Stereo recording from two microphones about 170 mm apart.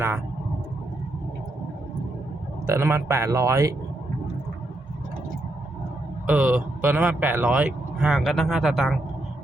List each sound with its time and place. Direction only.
2.6 s a man's voice: 15° right (ahead or behind)
6.2 s a man's voice: 10° right (ahead or behind)